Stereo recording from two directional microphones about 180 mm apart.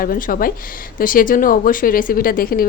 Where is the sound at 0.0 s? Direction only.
50° left (ahead or behind).